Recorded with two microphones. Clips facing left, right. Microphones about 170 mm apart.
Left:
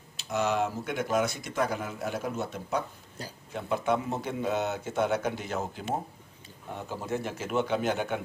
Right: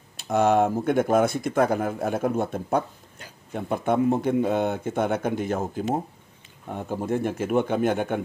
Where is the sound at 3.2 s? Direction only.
35° left (ahead or behind).